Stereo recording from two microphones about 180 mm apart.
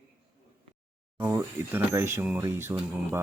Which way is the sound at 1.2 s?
15° right (ahead or behind).